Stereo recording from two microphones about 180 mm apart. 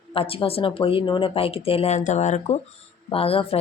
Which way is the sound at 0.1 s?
30° left (ahead or behind).